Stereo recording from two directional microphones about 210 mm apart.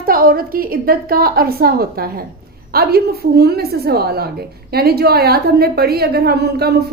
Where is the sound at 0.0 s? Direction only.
45° right (ahead or behind).